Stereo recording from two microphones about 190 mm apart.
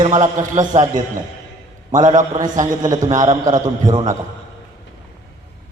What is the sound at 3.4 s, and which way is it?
Speech, 20° right (ahead or behind).